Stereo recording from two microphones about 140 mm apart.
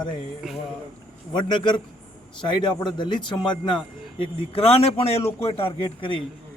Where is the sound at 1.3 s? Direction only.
35° left (ahead or behind).